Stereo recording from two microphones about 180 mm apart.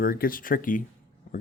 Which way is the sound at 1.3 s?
40° left (ahead or behind).